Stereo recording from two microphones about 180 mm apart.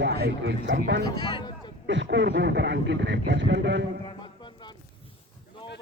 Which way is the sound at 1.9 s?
90° right.